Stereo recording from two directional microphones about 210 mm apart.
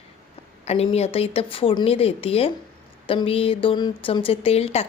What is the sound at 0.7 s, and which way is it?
Speech, 30° left (ahead or behind).